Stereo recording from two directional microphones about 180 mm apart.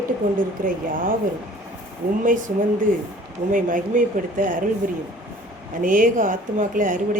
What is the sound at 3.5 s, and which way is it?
Speech, 50° right (ahead or behind).